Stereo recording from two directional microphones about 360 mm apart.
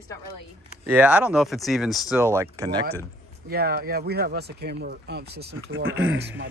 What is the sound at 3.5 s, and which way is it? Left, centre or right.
Speech, right.